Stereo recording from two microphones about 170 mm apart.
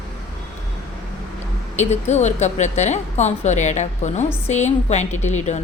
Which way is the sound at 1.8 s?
40° left (ahead or behind).